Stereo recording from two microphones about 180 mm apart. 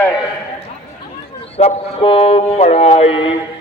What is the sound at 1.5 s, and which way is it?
Speech, 35° left (ahead or behind).